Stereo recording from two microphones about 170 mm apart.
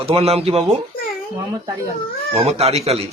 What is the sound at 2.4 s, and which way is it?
Speech, 35° right (ahead or behind).